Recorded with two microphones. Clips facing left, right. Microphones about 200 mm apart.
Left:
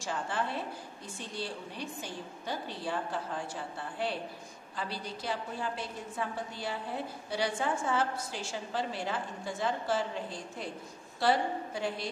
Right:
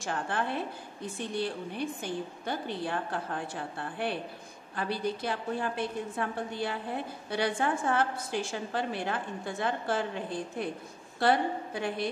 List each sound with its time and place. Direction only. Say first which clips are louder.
0.0 s a woman's voice: right 2 dB; 55° right (ahead or behind)